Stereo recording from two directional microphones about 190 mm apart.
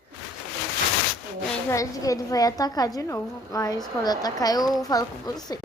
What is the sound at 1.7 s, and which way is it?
A woman's voice, 15° left (ahead or behind).